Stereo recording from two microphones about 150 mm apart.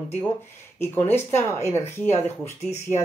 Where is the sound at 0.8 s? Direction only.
15° left (ahead or behind).